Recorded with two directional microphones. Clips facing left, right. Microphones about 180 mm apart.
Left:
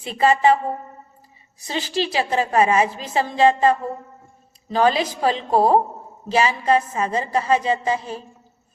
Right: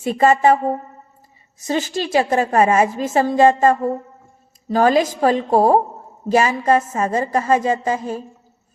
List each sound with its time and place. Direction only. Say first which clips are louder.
0.0 s a woman's voice: right 3 dB; 45° right (ahead or behind)